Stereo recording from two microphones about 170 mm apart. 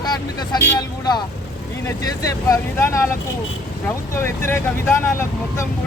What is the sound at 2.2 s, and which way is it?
Speech, 15° left (ahead or behind).